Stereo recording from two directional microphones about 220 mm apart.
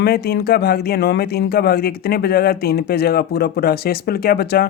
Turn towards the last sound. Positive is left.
turn(degrees=45)  # may be behind; listen again after turning